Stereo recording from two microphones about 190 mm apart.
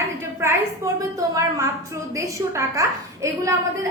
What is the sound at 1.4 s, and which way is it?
A woman's voice, 15° right (ahead or behind).